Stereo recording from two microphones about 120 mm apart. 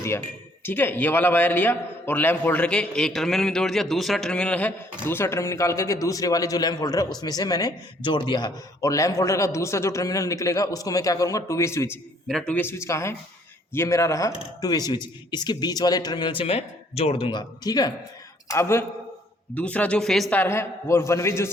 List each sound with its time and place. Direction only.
0.6 s a man's voice: 15° left (ahead or behind)
12.3 s speech: 5° left (ahead or behind)
12.5 s a man's voice: 20° left (ahead or behind); by 17.3 s 55° left (ahead or behind)
17.3 s a man's voice: 35° left (ahead or behind)
18.4 s a man's voice: 25° left (ahead or behind)
19.5 s speech: 10° left (ahead or behind)
20.3 s a man's voice: 20° left (ahead or behind)